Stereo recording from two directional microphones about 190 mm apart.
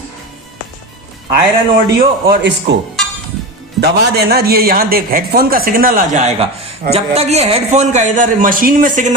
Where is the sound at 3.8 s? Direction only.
55° right (ahead or behind).